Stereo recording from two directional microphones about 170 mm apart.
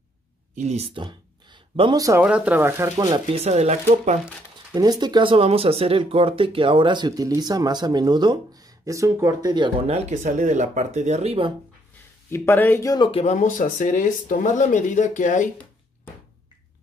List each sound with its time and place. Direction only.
0.6 s speech: 40° right (ahead or behind)
0.9 s a sound: 30° right (ahead or behind)
2.2 s speech: 5° right (ahead or behind)
3.3 s speech: 40° right (ahead or behind)
4.7 s speech: 25° right (ahead or behind)
12.3 s speech: 15° left (ahead or behind)
13.2 s speech: 45° left (ahead or behind)